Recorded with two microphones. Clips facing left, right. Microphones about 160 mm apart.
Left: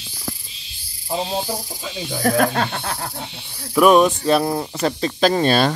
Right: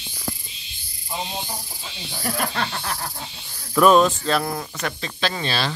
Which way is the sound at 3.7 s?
10° left (ahead or behind).